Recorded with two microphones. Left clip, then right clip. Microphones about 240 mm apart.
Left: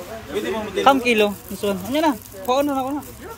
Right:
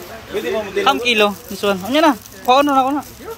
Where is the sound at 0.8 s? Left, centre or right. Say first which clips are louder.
Left 1 dB; left.